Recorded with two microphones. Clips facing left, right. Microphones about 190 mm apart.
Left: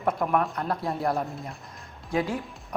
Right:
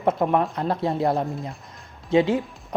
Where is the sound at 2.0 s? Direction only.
25° right (ahead or behind).